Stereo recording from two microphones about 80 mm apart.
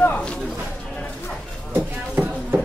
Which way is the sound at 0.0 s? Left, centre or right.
Left.